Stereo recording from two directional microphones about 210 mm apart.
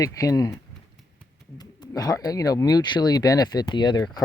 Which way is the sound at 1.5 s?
20° left (ahead or behind).